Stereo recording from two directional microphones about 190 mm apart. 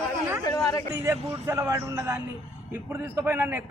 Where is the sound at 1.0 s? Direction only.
15° right (ahead or behind).